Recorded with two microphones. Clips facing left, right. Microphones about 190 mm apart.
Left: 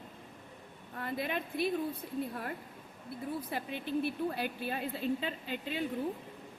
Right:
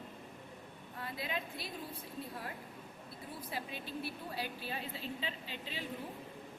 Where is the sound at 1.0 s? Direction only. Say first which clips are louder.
Left 6 dB; 55° left (ahead or behind).